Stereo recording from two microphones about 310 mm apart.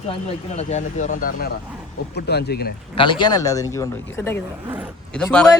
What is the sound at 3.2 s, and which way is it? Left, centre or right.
Speech, centre.